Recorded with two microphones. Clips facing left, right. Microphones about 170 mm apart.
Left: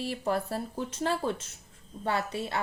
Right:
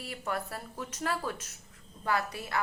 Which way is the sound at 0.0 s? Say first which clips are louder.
Left 6 dB; 30° left (ahead or behind).